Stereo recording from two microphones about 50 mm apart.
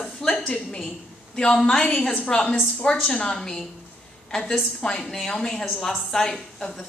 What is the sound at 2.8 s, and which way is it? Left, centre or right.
A woman's voice, centre.